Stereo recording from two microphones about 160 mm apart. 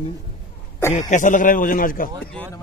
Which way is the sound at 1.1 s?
55° left (ahead or behind).